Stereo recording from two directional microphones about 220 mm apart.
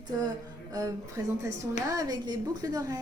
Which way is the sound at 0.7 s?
15° right (ahead or behind).